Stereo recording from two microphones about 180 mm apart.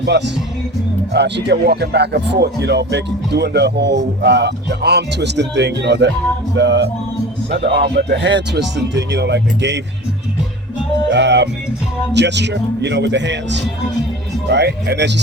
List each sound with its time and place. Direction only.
1.1 s speech: 70° right (ahead or behind)
11.1 s speech: 75° right (ahead or behind)